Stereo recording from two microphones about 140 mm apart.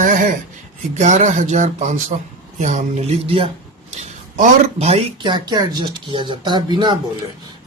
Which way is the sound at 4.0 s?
70° right (ahead or behind).